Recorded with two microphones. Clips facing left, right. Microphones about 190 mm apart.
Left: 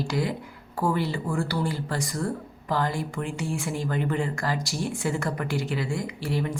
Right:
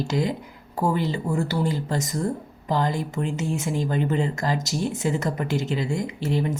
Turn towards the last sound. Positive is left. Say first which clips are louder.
# right 3 dB
turn(degrees=-25)  # may be behind; listen again after turning